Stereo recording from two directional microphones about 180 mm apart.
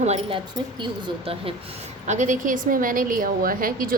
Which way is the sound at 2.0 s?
45° right (ahead or behind).